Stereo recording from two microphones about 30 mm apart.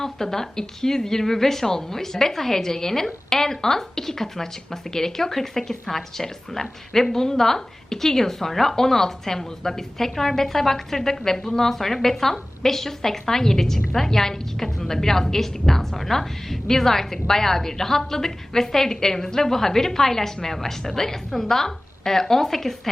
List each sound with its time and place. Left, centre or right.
0.0 s a woman's voice: centre